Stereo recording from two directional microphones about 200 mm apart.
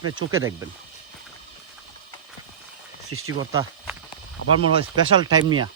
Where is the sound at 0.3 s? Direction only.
15° right (ahead or behind).